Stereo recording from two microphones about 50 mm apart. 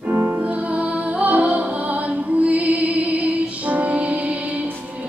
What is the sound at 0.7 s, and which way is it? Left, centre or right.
Music, right.